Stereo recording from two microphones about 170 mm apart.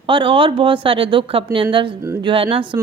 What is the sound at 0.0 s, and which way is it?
A woman's voice, 30° right (ahead or behind).